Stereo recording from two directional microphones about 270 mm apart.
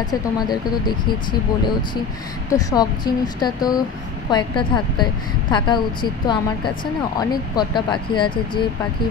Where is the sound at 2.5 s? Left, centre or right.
Centre.